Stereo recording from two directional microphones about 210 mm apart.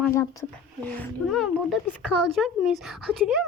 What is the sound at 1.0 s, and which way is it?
A woman's voice, centre (ahead or behind).